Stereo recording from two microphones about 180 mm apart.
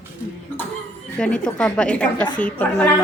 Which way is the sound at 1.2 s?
5° left (ahead or behind).